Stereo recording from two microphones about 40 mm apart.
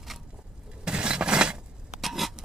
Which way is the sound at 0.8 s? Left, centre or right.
Right.